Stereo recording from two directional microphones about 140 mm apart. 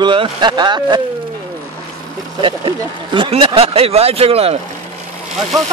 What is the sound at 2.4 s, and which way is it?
Speech, 35° right (ahead or behind).